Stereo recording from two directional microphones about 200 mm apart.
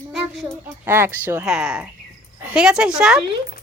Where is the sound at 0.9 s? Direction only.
10° right (ahead or behind).